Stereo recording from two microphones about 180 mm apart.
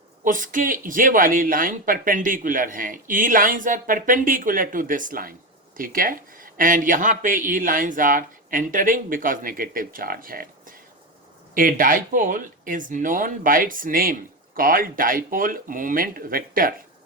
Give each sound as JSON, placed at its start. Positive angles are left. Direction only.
{"t": 0.3, "sound": "speech", "side_deg": -45}